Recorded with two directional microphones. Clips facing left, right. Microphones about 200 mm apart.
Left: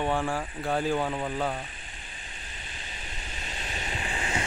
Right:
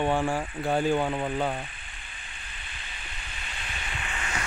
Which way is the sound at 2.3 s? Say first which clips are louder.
Left 2 dB; 40° left (ahead or behind).